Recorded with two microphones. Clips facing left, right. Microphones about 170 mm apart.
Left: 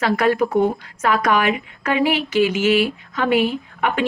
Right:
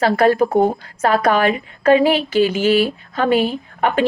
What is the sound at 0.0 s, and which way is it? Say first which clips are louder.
Speech: right 4 dB; 30° right (ahead or behind).